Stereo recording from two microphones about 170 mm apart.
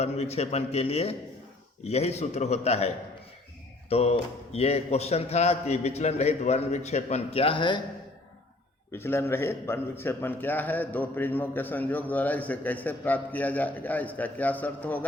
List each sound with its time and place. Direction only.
0.0 s speech: 40° left (ahead or behind)
8.9 s a man's voice: 15° left (ahead or behind)